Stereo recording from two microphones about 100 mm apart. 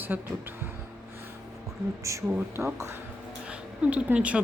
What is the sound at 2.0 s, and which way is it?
Speech, 30° right (ahead or behind).